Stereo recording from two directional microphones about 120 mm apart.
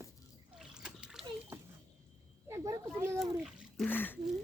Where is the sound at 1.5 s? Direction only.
20° right (ahead or behind).